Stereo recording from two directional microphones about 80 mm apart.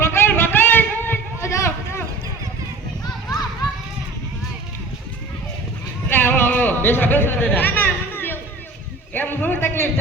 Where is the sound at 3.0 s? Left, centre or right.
Left.